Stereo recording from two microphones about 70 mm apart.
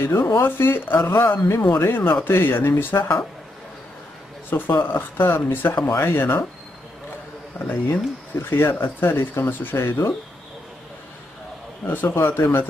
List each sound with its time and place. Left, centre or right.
0.0 s speech: left
0.3 s speech: left
4.5 s speech: left
7.5 s speech: left
11.8 s speech: left